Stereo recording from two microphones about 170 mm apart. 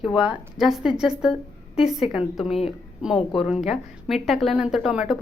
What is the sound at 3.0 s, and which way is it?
A woman's voice, centre (ahead or behind).